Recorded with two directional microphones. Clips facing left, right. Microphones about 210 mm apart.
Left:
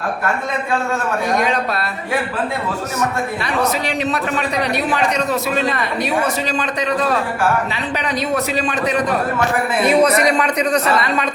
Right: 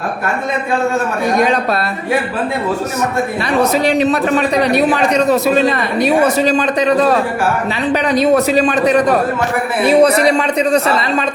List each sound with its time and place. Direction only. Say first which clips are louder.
3.8 s a man's voice: right 7 dB; 35° right (ahead or behind)
8.1 s a man's voice: right 9 dB; 35° right (ahead or behind)